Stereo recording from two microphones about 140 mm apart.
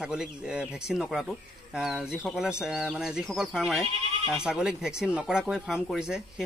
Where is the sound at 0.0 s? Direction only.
5° right (ahead or behind).